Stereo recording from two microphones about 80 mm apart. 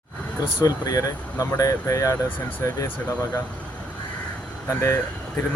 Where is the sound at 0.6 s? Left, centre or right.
Left.